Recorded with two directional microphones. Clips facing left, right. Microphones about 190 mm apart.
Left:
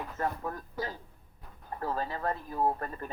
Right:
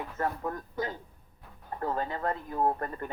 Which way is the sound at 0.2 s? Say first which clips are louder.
Right 2 dB; 20° right (ahead or behind).